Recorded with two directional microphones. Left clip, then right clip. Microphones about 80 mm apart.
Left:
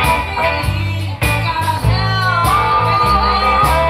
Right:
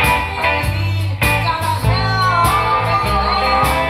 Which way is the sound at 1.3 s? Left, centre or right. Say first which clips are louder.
Even; right.